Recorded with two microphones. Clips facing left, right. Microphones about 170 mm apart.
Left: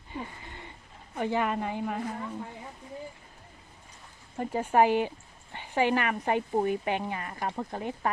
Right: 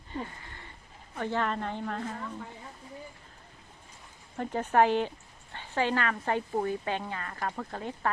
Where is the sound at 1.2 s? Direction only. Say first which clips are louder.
Left 2 dB; 15° left (ahead or behind).